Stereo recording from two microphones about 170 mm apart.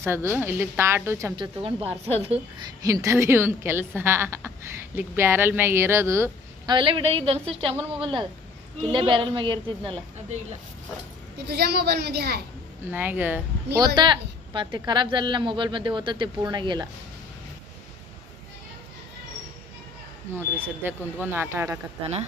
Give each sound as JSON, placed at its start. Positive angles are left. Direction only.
{"t": 0.0, "sound": "a woman's voice", "side_deg": -15}
{"t": 1.4, "sound": "a woman's voice", "side_deg": -35}
{"t": 2.8, "sound": "a woman's voice", "side_deg": -20}
{"t": 6.7, "sound": "a woman's voice", "side_deg": -30}
{"t": 11.3, "sound": "a woman's voice", "side_deg": -70}
{"t": 12.9, "sound": "a woman's voice", "side_deg": -10}
{"t": 13.7, "sound": "speech", "side_deg": -25}
{"t": 20.8, "sound": "a woman's voice", "side_deg": -15}
{"t": 22.0, "sound": "a woman's voice", "side_deg": -40}